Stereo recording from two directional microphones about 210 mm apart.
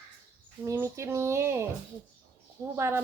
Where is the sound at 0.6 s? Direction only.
15° right (ahead or behind).